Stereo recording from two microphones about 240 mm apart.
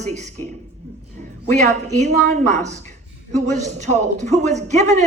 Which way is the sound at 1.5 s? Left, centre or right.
Right.